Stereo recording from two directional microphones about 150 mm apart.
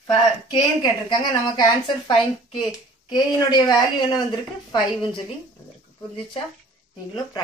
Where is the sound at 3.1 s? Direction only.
30° left (ahead or behind).